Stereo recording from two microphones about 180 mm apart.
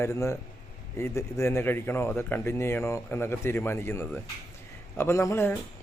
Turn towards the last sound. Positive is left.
turn(degrees=15)  # may be behind; listen again after turning